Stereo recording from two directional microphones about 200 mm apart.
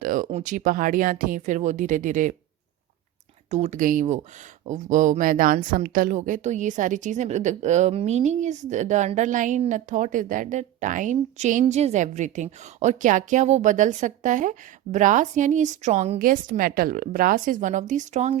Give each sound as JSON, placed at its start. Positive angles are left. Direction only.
{"t": 0.0, "sound": "speech", "side_deg": -40}
{"t": 3.5, "sound": "speech", "side_deg": -35}